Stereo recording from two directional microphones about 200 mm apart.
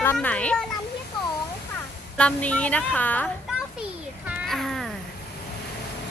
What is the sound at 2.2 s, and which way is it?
A woman's voice, 5° left (ahead or behind).